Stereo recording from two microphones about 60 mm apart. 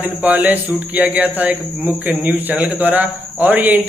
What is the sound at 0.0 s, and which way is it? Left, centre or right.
A man's voice, right.